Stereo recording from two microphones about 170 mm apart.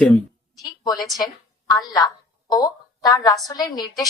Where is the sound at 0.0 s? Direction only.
Centre (ahead or behind).